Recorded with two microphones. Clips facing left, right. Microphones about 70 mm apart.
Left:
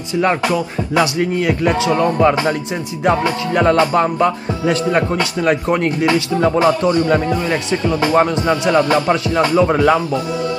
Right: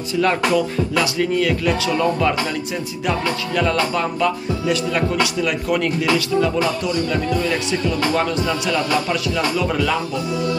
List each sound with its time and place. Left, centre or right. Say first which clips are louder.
0.9 s speech: left 4 dB; left
3.1 s music: left 6 dB; left